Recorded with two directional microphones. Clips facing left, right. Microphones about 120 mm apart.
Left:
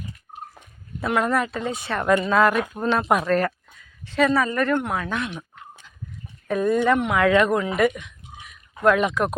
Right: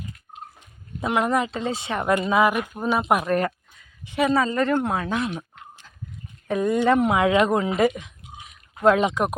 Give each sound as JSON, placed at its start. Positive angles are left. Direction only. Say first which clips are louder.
{"t": 0.9, "sound": "a woman's voice", "louder": "even", "side_deg": -15}
{"t": 4.3, "sound": "a woman's voice", "louder": "even", "side_deg": -25}
{"t": 6.5, "sound": "speech", "louder": "even", "side_deg": -20}
{"t": 7.2, "sound": "speech", "louder": "left 1 dB", "side_deg": -15}